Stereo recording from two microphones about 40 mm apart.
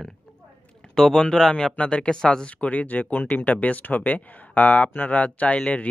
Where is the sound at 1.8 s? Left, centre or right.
Left.